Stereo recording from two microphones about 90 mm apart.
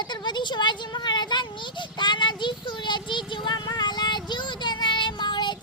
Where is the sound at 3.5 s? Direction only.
50° left (ahead or behind).